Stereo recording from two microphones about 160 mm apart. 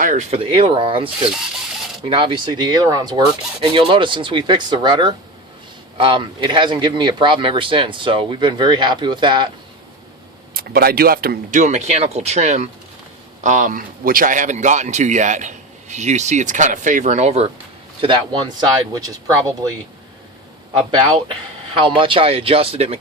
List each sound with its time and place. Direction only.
0.0 s speech: 50° right (ahead or behind); by 9.5 s 30° right (ahead or behind)
10.5 s speech: 70° right (ahead or behind)
11.6 s speech: 45° right (ahead or behind)
18.0 s speech: 30° right (ahead or behind)
20.7 s speech: 30° right (ahead or behind)